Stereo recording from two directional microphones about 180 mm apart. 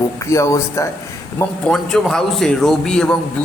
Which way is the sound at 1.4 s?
5° left (ahead or behind).